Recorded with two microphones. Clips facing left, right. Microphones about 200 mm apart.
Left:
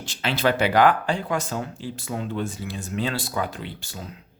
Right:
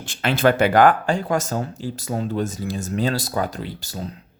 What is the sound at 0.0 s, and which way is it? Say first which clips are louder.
Speech: right 5 dB; 50° right (ahead or behind).